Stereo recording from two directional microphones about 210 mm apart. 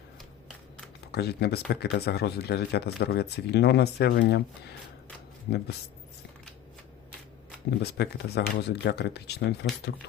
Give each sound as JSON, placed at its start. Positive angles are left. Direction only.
{"t": 1.0, "sound": "speech", "side_deg": 50}
{"t": 5.5, "sound": "speech", "side_deg": 50}
{"t": 7.8, "sound": "speech", "side_deg": 50}